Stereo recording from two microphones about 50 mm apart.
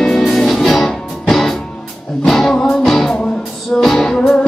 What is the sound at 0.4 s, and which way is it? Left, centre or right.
Music, centre.